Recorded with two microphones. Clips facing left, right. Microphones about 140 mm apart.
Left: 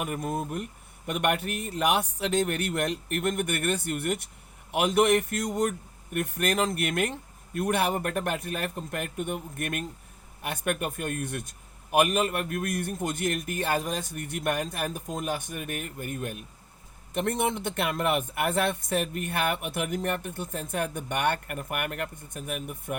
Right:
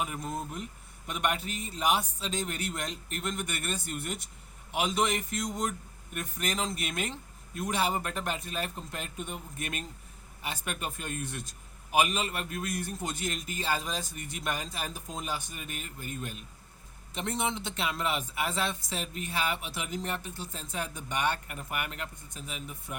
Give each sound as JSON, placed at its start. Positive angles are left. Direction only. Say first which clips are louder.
{"t": 0.0, "sound": "a man's voice", "louder": "left 4 dB", "side_deg": 60}